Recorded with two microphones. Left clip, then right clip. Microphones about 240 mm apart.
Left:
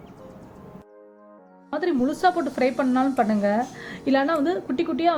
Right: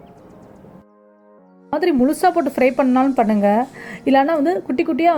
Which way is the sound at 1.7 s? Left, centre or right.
Right.